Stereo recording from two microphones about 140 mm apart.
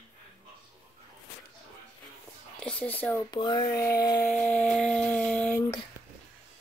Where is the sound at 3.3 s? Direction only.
30° left (ahead or behind).